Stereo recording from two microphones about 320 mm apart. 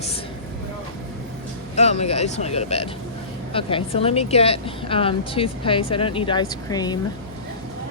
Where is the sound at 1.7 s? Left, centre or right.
Centre.